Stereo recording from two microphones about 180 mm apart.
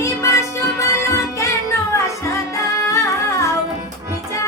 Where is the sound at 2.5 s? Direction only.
15° left (ahead or behind).